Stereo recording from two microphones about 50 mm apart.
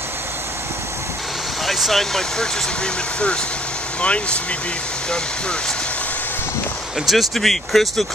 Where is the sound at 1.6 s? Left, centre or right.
Centre; by 4.4 s left.